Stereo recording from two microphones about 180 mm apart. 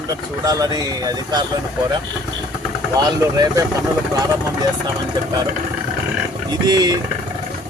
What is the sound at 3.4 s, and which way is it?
Speech, 20° right (ahead or behind).